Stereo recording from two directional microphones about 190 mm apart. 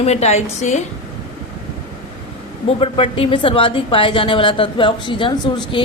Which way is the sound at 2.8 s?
30° left (ahead or behind).